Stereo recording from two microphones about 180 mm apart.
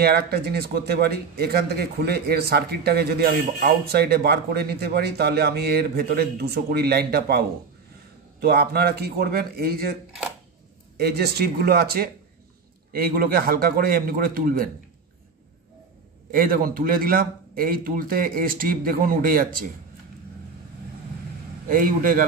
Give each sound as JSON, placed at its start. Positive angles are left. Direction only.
{"t": 0.0, "sound": "a man's voice", "side_deg": -60}
{"t": 11.0, "sound": "a man's voice", "side_deg": -60}
{"t": 16.3, "sound": "a man's voice", "side_deg": -55}
{"t": 21.6, "sound": "a man's voice", "side_deg": -50}